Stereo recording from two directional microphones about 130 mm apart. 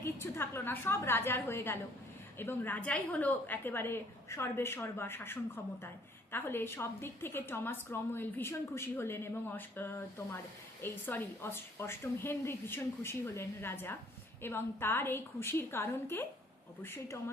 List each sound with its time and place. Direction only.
0.0 s a woman's voice: 20° left (ahead or behind)